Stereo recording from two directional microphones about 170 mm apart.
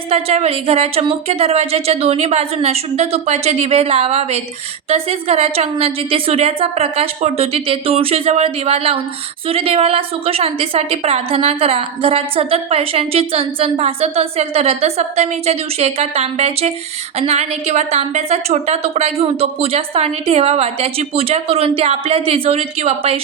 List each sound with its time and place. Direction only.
0.1 s a woman's voice: 35° right (ahead or behind)